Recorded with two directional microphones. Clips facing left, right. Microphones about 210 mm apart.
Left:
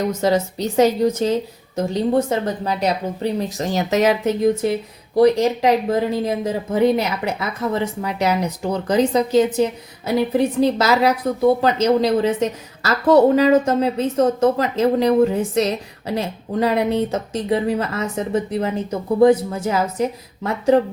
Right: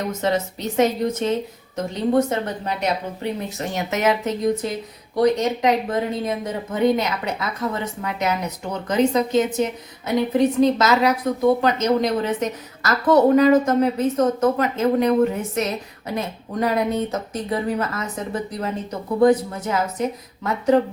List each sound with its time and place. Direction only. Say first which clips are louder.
0.8 s a woman's voice: left 4 dB; 35° left (ahead or behind)
19.2 s a woman's voice: left 2 dB; 30° left (ahead or behind)